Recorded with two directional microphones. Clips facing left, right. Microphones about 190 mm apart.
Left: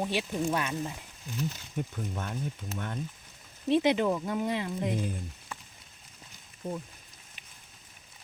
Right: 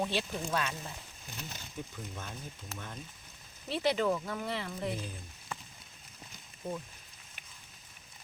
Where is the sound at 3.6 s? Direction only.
20° left (ahead or behind).